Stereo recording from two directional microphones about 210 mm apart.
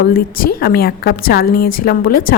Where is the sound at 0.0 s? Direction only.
45° left (ahead or behind).